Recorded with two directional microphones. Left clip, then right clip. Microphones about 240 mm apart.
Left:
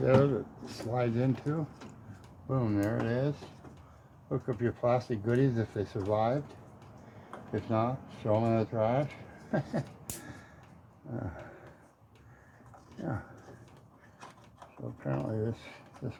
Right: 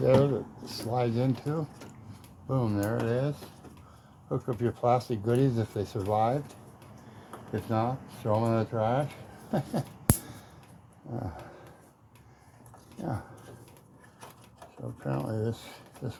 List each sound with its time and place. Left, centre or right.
0.0 s speech: centre
7.7 s speech: centre
13.0 s speech: centre
15.0 s speech: centre